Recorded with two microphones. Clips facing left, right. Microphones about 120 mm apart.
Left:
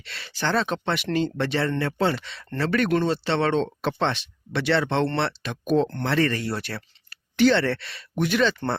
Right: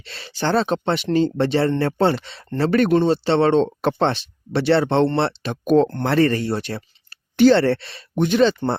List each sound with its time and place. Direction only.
0.0 s speech: 30° right (ahead or behind)
5.6 s speech: 50° right (ahead or behind)
5.9 s speech: 35° right (ahead or behind)